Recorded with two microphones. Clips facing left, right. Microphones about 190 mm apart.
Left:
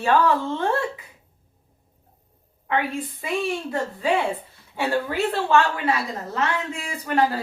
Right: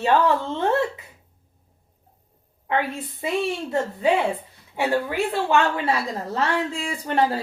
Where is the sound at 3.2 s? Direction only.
25° right (ahead or behind).